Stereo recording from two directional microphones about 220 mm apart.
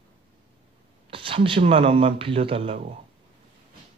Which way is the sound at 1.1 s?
25° right (ahead or behind).